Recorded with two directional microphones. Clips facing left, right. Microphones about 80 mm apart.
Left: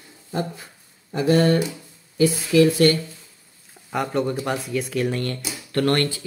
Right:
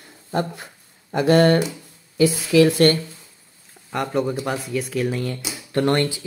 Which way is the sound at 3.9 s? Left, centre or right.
Centre.